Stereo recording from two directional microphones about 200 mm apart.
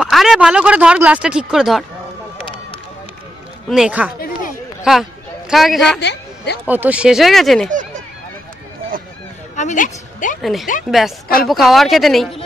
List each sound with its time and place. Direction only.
0.0 s speech: centre (ahead or behind)
3.6 s speech: 5° right (ahead or behind)
5.5 s speech: centre (ahead or behind)
5.9 s a sound: 55° left (ahead or behind)
6.6 s speech: 10° right (ahead or behind)
9.6 s a sound: 35° left (ahead or behind)
10.4 s speech: centre (ahead or behind)